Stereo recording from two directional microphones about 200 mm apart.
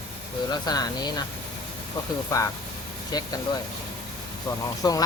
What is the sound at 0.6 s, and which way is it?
Speech, 20° left (ahead or behind).